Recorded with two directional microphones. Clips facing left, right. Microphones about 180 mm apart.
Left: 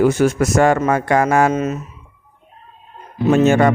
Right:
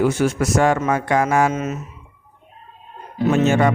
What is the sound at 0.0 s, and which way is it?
Speech, 45° left (ahead or behind).